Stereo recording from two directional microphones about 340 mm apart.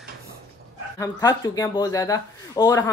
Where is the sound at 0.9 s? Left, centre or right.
Centre.